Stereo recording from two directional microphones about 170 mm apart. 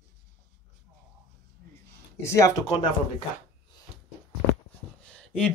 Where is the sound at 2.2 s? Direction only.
15° left (ahead or behind).